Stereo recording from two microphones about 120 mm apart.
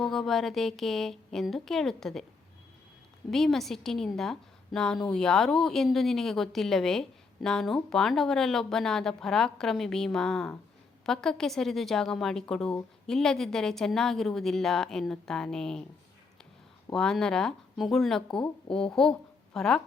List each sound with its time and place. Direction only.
0.0 s a woman's voice: centre (ahead or behind)
3.2 s a woman's voice: centre (ahead or behind)
16.9 s a woman's voice: 5° left (ahead or behind)